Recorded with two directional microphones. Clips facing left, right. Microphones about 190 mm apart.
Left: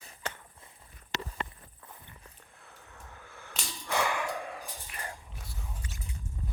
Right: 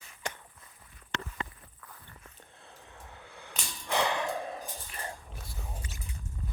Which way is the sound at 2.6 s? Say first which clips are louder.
Right 2 dB; 25° right (ahead or behind).